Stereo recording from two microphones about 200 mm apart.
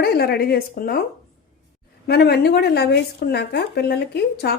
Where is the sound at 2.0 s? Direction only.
55° left (ahead or behind).